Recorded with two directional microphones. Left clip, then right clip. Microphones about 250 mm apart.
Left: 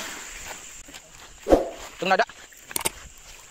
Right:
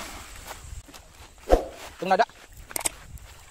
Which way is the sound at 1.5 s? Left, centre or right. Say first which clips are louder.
Left 3 dB; centre.